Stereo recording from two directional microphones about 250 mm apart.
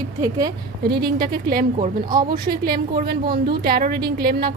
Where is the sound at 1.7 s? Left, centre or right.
Right.